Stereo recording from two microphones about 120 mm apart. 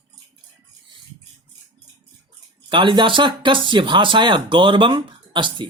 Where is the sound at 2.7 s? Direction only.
40° right (ahead or behind).